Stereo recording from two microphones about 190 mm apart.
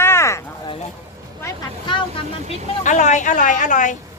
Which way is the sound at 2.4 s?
35° left (ahead or behind).